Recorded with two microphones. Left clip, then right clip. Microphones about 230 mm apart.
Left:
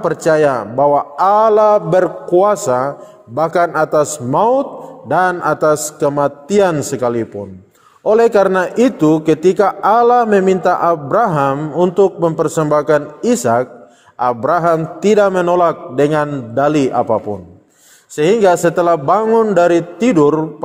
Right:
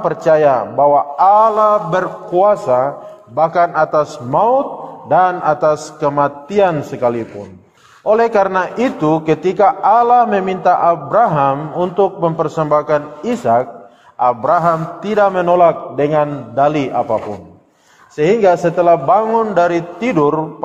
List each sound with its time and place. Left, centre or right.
0.0 s a man's voice: left